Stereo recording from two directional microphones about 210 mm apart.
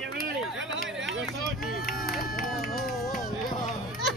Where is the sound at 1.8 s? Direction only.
45° left (ahead or behind).